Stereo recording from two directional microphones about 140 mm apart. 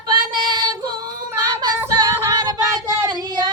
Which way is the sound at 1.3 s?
30° right (ahead or behind).